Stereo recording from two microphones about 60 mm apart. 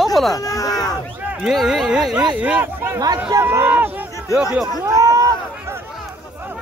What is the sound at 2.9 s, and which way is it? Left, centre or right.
Speech, right.